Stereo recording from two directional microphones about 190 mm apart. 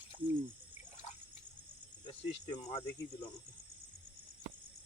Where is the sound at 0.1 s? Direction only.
25° left (ahead or behind).